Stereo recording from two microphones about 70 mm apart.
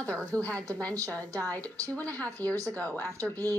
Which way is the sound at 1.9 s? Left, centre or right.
Left.